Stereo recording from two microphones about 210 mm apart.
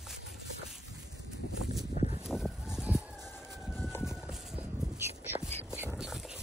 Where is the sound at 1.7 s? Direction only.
15° right (ahead or behind).